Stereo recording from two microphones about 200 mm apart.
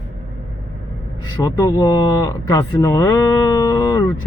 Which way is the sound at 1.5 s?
20° left (ahead or behind).